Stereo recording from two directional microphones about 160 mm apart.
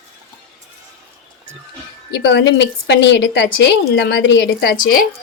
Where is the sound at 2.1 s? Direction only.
90° left.